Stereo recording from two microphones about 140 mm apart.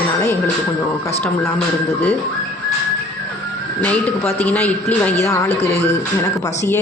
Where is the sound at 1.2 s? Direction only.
10° left (ahead or behind).